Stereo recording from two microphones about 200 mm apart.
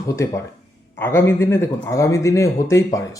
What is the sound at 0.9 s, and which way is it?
A man's voice, 10° left (ahead or behind).